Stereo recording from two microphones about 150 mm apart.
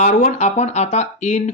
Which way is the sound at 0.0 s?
50° left (ahead or behind).